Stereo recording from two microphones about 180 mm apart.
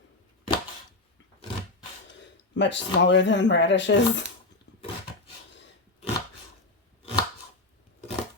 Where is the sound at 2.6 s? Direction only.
85° left.